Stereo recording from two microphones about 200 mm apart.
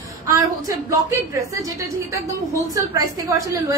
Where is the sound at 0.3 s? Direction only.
15° right (ahead or behind).